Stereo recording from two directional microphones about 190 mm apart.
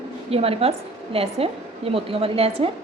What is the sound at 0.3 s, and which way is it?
A woman's voice, 30° right (ahead or behind).